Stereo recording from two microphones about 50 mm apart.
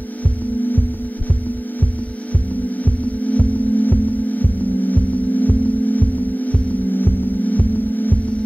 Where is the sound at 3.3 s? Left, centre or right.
Left.